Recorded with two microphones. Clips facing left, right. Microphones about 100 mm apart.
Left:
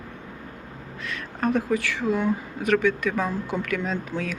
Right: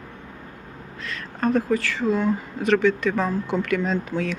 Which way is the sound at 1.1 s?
15° left (ahead or behind).